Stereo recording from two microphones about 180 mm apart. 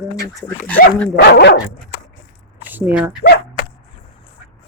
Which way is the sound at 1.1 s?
65° left (ahead or behind).